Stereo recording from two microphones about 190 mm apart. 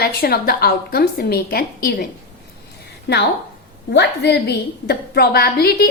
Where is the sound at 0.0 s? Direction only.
55° left (ahead or behind).